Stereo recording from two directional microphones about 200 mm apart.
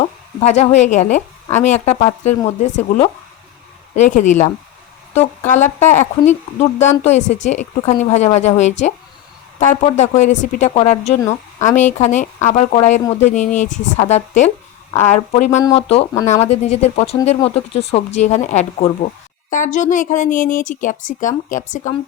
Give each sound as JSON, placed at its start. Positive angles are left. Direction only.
{"t": 0.3, "sound": "speech", "side_deg": 30}
{"t": 15.4, "sound": "speech", "side_deg": 15}
{"t": 16.2, "sound": "speech", "side_deg": 35}